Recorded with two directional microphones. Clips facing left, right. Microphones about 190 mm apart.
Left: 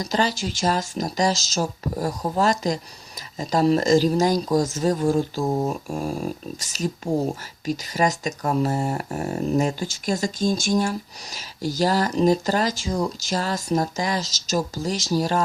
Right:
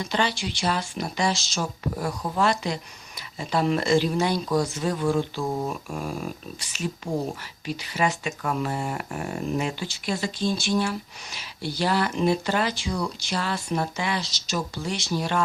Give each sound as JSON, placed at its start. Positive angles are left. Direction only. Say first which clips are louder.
{"t": 0.0, "sound": "speech", "louder": "left 3 dB", "side_deg": 40}
{"t": 5.5, "sound": "speech", "louder": "left 5 dB", "side_deg": 25}
{"t": 5.9, "sound": "speech", "louder": "left 4 dB", "side_deg": 40}